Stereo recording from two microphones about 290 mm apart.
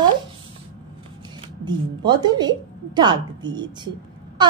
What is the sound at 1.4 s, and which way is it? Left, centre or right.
Speech, centre.